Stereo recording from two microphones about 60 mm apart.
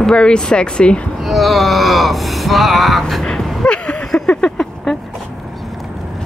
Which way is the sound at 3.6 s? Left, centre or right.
Centre.